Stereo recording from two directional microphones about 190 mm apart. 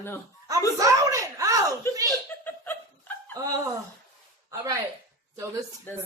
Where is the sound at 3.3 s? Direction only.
20° right (ahead or behind).